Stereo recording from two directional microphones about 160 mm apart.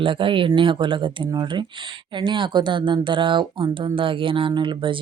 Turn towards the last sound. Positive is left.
turn(degrees=-30)  # may be behind; listen again after turning